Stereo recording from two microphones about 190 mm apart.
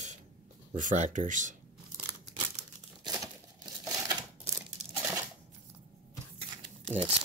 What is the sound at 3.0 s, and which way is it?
Tearing, 20° right (ahead or behind).